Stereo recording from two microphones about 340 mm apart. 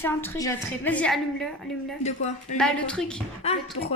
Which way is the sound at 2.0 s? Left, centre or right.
Centre.